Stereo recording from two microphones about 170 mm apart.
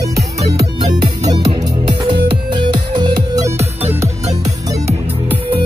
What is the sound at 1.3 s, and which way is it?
Music, 25° right (ahead or behind).